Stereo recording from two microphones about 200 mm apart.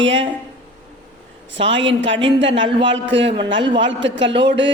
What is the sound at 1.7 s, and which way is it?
A woman's voice, 65° right (ahead or behind).